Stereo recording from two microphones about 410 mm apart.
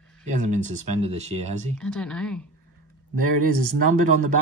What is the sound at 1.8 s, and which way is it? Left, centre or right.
Speech, centre.